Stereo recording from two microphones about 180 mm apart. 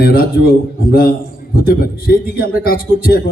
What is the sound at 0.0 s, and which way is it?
Speech, 55° left (ahead or behind).